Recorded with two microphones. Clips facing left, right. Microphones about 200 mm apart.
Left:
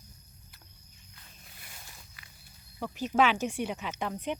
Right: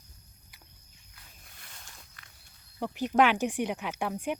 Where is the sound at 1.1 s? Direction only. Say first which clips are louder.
Left 1 dB; 5° left (ahead or behind).